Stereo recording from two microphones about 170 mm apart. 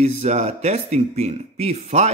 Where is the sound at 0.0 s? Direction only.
40° right (ahead or behind).